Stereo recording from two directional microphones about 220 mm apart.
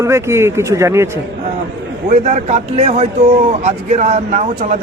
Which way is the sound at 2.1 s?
35° right (ahead or behind).